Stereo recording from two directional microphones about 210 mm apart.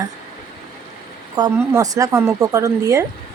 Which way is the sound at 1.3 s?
20° right (ahead or behind).